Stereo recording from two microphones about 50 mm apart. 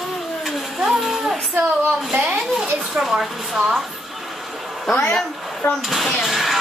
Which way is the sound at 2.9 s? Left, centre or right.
Centre.